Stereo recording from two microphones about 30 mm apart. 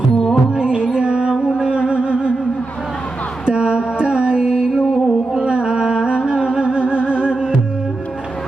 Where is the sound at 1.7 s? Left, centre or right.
Right.